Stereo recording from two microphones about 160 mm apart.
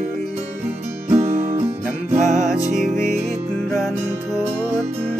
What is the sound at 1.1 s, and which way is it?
Music, 45° right (ahead or behind).